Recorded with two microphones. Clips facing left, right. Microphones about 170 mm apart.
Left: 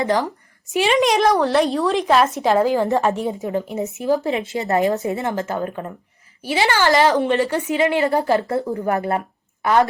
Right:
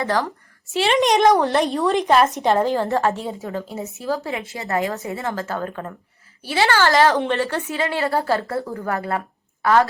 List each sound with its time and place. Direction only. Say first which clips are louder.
0.0 s a woman's voice: left 2 dB; 20° left (ahead or behind)
0.9 s a woman's voice: right 2 dB; centre (ahead or behind); by 9.9 s 20° left (ahead or behind)